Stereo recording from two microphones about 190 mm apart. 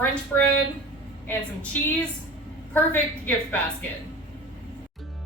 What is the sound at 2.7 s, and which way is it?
Speech, 10° left (ahead or behind).